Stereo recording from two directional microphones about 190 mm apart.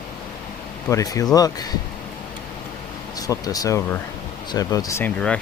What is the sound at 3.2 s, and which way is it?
Speech, 20° left (ahead or behind).